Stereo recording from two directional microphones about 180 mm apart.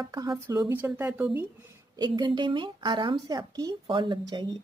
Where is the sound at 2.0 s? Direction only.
25° right (ahead or behind).